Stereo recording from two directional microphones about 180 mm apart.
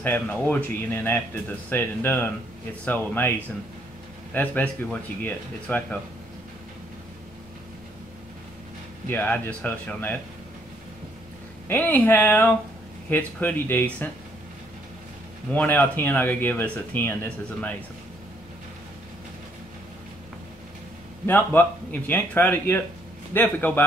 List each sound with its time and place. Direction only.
0.0 s speech: 10° left (ahead or behind)
9.1 s speech: 10° left (ahead or behind)
11.6 s speech: 10° left (ahead or behind)
15.5 s speech: 10° left (ahead or behind)
21.3 s speech: 10° left (ahead or behind)